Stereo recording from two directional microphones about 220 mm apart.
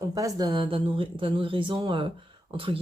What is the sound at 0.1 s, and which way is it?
Speech, 15° right (ahead or behind).